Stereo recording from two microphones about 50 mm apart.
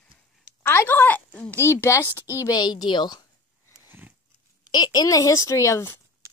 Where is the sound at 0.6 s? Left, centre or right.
Left.